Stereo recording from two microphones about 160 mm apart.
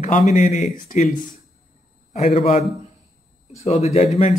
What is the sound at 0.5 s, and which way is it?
Speech, 60° left (ahead or behind).